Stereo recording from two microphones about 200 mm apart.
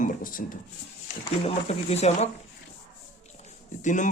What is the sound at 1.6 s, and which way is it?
Speech, 35° left (ahead or behind).